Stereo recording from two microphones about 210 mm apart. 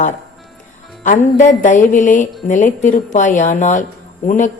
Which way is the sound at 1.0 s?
35° left (ahead or behind).